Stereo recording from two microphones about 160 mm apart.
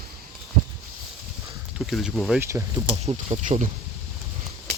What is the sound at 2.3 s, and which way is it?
Speech, 15° right (ahead or behind).